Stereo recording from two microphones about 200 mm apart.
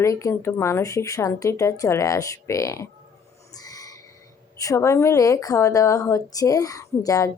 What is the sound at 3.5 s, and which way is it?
Owl, 20° left (ahead or behind).